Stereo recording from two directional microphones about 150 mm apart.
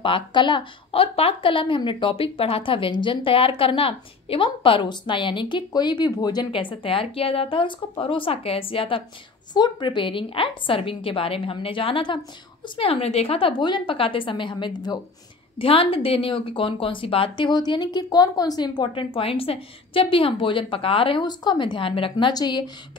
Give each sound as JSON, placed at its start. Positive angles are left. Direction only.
{"t": 0.0, "sound": "a woman's voice", "side_deg": 35}